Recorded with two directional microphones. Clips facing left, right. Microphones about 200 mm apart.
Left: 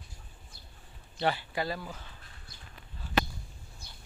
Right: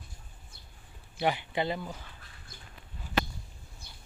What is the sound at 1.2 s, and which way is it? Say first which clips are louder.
Speech: right 1 dB; 15° right (ahead or behind).